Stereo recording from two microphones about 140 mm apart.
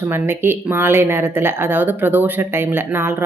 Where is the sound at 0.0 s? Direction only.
15° right (ahead or behind).